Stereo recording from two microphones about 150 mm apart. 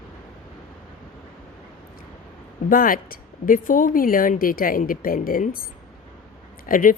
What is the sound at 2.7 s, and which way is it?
Speech, 70° left (ahead or behind).